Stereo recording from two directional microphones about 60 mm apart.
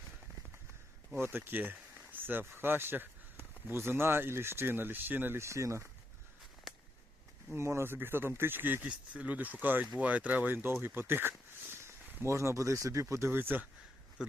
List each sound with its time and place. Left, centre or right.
1.2 s speech: right
5.4 s speech: right
7.5 s speech: right
8.8 s speech: right
14.2 s speech: centre